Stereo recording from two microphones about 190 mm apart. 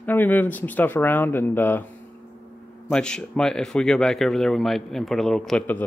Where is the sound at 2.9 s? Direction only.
5° left (ahead or behind).